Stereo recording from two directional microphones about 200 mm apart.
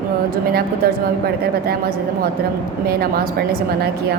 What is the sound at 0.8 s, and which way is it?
Speech, 50° right (ahead or behind).